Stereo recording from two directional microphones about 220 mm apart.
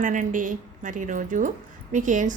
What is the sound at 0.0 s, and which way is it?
A woman's voice, 35° right (ahead or behind).